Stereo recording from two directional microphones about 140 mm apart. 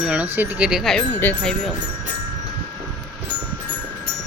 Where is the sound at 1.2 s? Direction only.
5° left (ahead or behind).